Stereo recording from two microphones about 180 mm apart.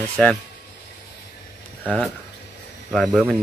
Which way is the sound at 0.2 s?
5° left (ahead or behind).